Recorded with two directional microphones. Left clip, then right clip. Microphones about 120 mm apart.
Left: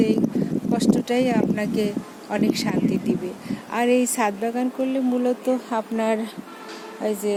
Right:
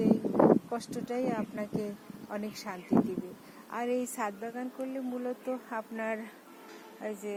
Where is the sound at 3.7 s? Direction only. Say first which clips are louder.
Left 12 dB; 25° left (ahead or behind).